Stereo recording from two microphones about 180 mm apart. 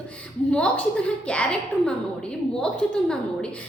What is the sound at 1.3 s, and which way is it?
Speech, 5° left (ahead or behind).